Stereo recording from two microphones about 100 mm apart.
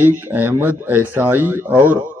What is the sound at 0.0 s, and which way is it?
A man's voice, 20° right (ahead or behind).